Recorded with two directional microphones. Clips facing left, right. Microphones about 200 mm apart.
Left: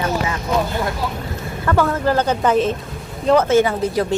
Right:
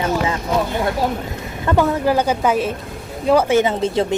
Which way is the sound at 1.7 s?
20° right (ahead or behind).